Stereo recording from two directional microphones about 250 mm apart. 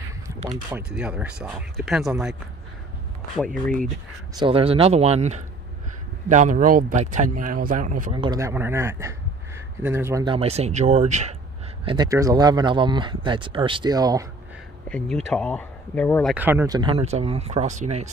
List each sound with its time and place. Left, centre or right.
0.7 s speech: centre
3.6 s speech: centre
4.4 s speech: right
8.1 s speech: centre
14.9 s speech: centre; by 18.1 s right